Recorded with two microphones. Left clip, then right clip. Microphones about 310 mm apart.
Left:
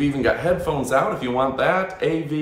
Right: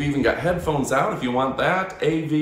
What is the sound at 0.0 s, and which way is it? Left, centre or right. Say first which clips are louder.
Speech: left 1 dB; centre.